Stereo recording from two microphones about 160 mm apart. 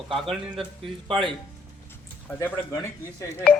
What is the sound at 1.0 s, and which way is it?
Speech, 30° right (ahead or behind).